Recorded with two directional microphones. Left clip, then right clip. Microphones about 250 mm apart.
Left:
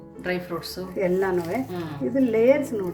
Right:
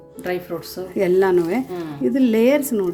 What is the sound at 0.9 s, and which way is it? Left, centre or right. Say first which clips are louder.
Speech: right 7 dB; right.